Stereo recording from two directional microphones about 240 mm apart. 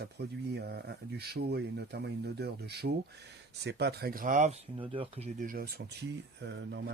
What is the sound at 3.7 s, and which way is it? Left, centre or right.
Mantra, right.